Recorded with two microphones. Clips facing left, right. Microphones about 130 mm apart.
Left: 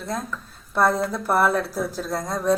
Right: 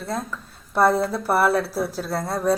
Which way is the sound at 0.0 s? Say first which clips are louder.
Right 1 dB; 5° right (ahead or behind).